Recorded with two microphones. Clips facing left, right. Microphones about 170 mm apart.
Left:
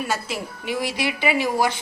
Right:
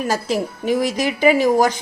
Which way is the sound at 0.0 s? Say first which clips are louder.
Right 6 dB; 40° right (ahead or behind).